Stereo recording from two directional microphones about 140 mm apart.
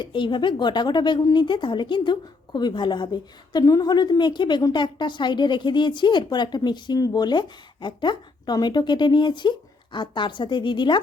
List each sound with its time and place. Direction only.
0.0 s a woman's voice: 35° left (ahead or behind)